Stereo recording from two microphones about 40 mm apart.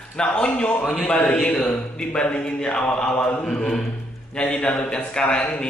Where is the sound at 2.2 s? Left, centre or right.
Left.